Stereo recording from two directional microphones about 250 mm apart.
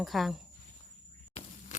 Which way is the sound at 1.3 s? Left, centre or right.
Left.